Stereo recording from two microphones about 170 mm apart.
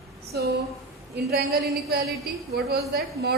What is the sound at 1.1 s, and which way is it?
A woman's voice, 75° right (ahead or behind).